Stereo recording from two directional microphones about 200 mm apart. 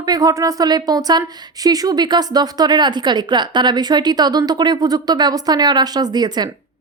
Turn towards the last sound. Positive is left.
turn(degrees=-20)  # may be behind; listen again after turning